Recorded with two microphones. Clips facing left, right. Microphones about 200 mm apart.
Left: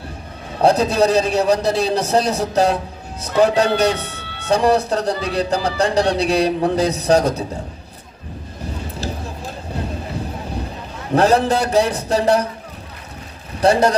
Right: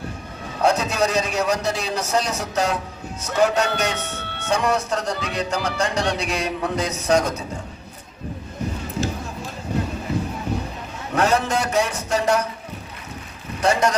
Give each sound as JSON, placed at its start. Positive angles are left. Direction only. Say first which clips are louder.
{"t": 0.6, "sound": "speech", "louder": "left 5 dB", "side_deg": 35}
{"t": 11.1, "sound": "speech", "louder": "left 5 dB", "side_deg": 35}
{"t": 13.6, "sound": "speech", "louder": "left 5 dB", "side_deg": 35}